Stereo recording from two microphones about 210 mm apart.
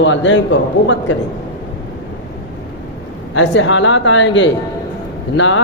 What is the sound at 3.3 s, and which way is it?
A man's voice, 65° left (ahead or behind).